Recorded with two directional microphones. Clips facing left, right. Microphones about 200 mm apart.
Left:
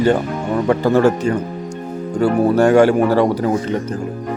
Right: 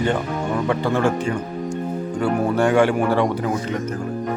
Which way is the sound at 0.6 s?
40° left (ahead or behind).